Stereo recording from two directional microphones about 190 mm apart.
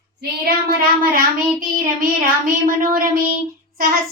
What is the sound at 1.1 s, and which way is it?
Child singing, 45° right (ahead or behind).